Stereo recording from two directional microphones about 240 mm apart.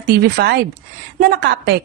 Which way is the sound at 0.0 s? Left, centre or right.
Right.